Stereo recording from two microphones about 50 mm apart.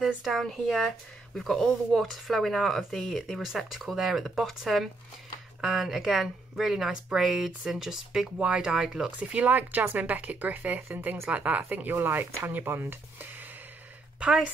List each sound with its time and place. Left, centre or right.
0.0 s speech: centre
0.4 s speech: centre
8.4 s speech: right
9.3 s speech: right